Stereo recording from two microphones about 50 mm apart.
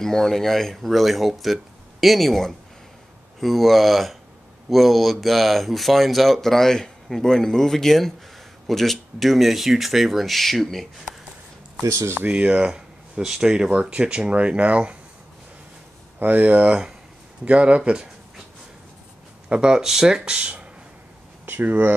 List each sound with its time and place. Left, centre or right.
0.0 s speech: centre
12.3 s speech: right
16.2 s speech: right
19.5 s speech: centre
21.5 s speech: right